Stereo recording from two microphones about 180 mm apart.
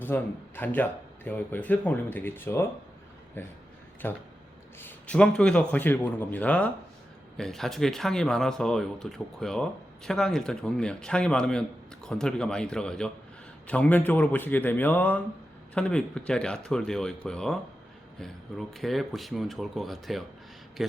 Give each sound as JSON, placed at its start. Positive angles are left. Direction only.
{"t": 0.0, "sound": "speech", "side_deg": 10}